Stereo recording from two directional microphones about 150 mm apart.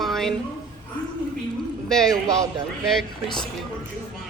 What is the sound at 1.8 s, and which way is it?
Speech, 5° left (ahead or behind).